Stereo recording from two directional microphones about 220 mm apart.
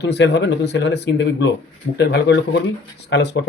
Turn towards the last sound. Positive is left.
turn(degrees=50)  # may be behind; listen again after turning